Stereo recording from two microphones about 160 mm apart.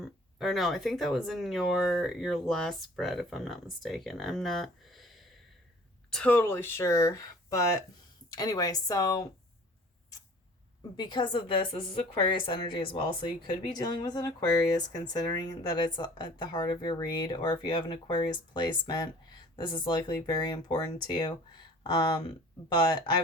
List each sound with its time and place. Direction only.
0.0 s speech: centre (ahead or behind); by 9.3 s 20° left (ahead or behind)
10.9 s speech: 30° left (ahead or behind)